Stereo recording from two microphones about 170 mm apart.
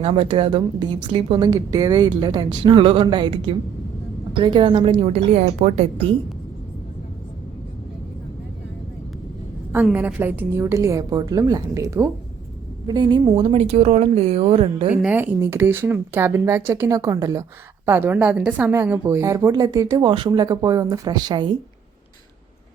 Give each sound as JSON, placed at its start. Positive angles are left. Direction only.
{"t": 0.0, "sound": "a woman's voice", "side_deg": -35}
{"t": 9.7, "sound": "a woman's voice", "side_deg": -10}
{"t": 15.0, "sound": "a woman's voice", "side_deg": -10}